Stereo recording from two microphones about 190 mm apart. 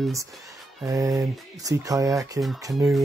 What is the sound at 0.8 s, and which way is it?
Speech, 15° right (ahead or behind).